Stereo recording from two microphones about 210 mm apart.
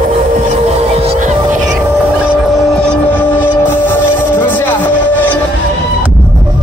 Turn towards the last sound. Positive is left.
turn(degrees=10)  # may be behind; listen again after turning